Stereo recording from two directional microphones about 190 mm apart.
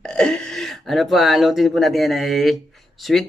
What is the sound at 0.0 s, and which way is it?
Speech, 5° left (ahead or behind).